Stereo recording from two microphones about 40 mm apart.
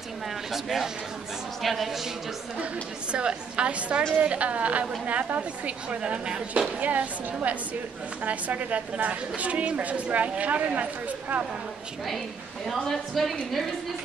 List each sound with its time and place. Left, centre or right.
0.5 s a man's voice: centre
2.6 s a woman's voice: right
6.8 s a woman's voice: right
12.8 s a woman's voice: centre